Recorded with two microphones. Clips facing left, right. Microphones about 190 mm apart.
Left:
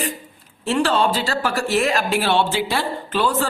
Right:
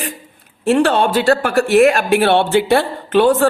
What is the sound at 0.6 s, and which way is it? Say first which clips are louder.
Speech: right 5 dB; 55° right (ahead or behind).